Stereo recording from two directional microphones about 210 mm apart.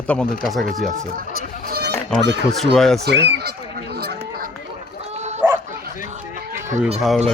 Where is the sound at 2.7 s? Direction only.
Centre (ahead or behind).